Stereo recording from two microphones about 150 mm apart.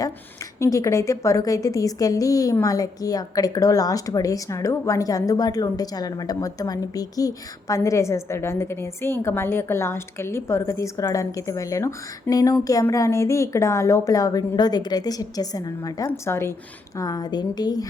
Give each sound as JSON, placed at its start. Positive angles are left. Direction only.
{"t": 0.6, "sound": "a woman's voice", "side_deg": 20}